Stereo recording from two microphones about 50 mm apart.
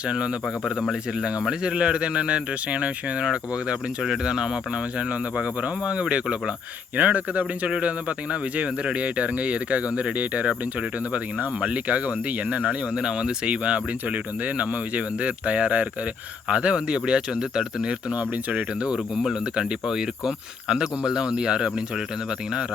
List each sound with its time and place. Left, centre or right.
1.2 s speech: centre
4.0 s speech: centre; by 12.6 s right
12.6 s speech: centre
18.1 s speech: right
19.1 s speech: centre